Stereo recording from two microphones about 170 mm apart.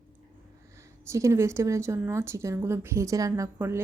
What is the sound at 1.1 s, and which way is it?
Speech, 15° right (ahead or behind).